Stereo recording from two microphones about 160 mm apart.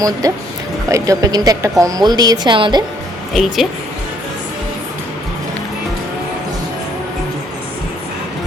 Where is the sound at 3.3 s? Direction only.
Centre (ahead or behind).